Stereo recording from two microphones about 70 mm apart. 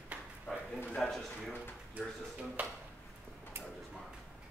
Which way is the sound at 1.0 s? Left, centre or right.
Centre.